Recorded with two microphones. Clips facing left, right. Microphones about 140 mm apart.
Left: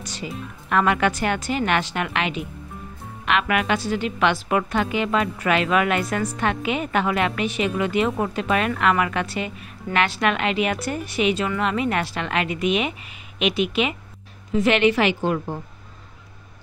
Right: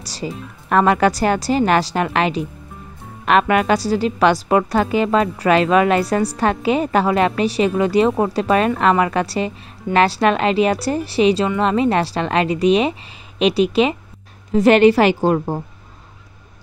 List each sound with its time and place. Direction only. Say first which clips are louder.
0.0 s a woman's voice: right 4 dB; 35° right (ahead or behind)